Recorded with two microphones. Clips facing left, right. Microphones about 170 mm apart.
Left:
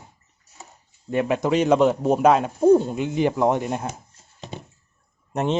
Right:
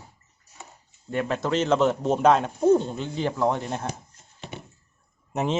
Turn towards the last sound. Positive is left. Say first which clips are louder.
# left 3 dB
turn(degrees=0)  # may be behind; listen again after turning